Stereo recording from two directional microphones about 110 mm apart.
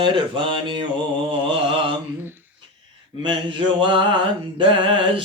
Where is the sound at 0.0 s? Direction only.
50° right (ahead or behind).